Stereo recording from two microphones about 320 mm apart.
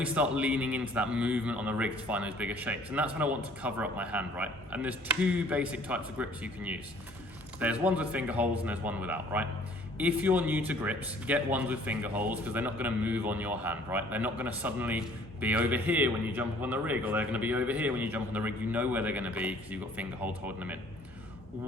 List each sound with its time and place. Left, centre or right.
0.0 s speech: centre